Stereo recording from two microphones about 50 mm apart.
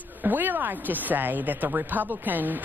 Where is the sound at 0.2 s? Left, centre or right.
Right.